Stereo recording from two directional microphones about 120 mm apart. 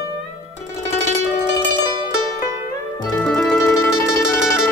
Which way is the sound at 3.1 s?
5° left (ahead or behind).